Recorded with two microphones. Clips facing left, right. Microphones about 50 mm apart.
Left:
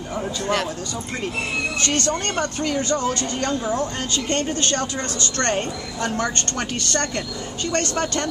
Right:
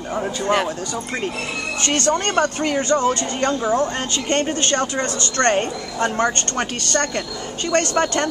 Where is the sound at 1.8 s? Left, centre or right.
Right.